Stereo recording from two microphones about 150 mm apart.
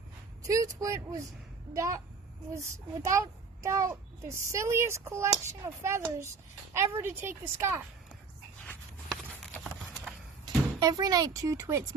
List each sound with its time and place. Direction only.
0.4 s a child's voice: 20° right (ahead or behind)
10.4 s speech: 25° right (ahead or behind)